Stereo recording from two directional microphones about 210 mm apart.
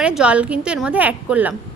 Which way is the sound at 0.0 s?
5° right (ahead or behind).